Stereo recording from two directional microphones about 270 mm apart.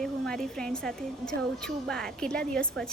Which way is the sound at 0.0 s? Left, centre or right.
Centre.